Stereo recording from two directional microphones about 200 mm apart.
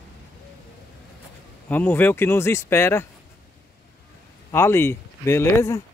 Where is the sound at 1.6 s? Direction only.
10° left (ahead or behind).